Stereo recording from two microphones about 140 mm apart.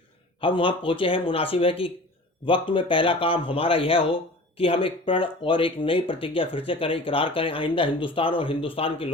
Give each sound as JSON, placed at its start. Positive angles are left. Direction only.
{"t": 0.4, "sound": "speech", "side_deg": 35}